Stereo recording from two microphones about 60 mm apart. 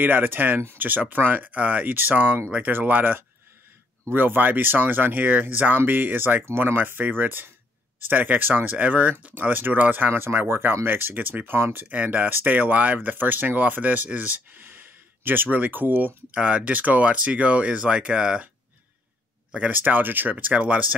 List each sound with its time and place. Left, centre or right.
0.0 s speech: right
11.9 s speech: right
16.3 s speech: right
19.7 s speech: right